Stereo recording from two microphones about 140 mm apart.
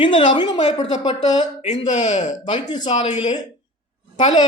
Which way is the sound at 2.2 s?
60° left (ahead or behind).